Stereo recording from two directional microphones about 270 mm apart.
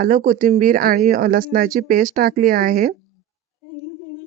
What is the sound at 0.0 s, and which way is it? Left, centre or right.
A woman's voice, right.